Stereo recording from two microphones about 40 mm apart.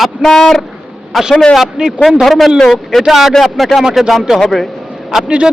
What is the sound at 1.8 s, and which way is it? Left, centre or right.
Speech, right.